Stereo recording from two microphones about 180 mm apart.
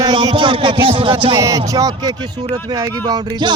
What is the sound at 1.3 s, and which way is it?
Speech, 20° right (ahead or behind).